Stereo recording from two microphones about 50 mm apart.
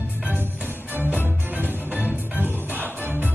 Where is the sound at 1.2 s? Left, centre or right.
Right.